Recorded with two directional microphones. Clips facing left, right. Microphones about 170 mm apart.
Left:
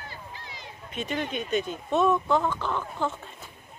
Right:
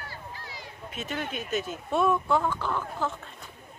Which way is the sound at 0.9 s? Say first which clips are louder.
Left 3 dB; 5° right (ahead or behind).